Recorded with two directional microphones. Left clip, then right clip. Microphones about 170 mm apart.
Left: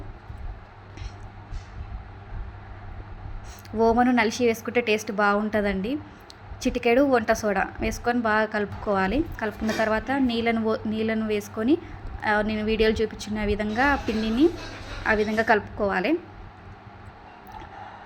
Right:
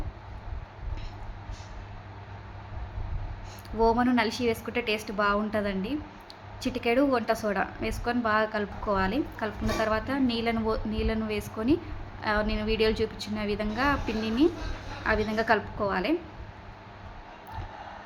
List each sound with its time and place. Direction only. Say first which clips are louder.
3.8 s a woman's voice: left 4 dB; 20° left (ahead or behind)